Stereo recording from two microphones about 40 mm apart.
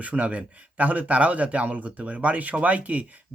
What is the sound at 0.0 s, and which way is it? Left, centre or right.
Speech, right.